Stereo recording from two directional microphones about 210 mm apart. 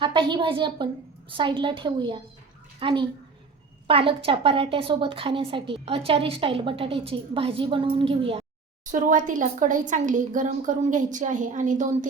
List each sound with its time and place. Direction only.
0.0 s a woman's voice: 25° right (ahead or behind)
8.9 s a woman's voice: 40° right (ahead or behind)